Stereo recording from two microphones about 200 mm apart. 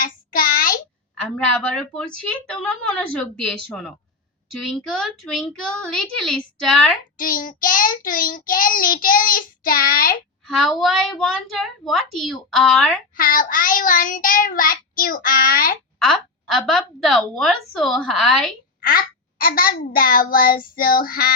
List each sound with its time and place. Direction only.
0.0 s a sound: 45° left (ahead or behind)
1.1 s a woman's voice: 5° left (ahead or behind)
7.2 s child singing: 45° left (ahead or behind)
10.4 s a woman's voice: centre (ahead or behind)
13.1 s child singing: 45° left (ahead or behind)
16.0 s a woman's voice: centre (ahead or behind)
18.8 s child singing: 45° left (ahead or behind)